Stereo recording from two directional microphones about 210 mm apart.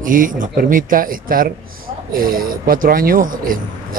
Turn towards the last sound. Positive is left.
turn(degrees=-40)  # may be behind; listen again after turning